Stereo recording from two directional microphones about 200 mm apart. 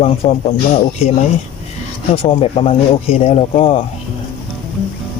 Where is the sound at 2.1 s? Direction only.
30° left (ahead or behind).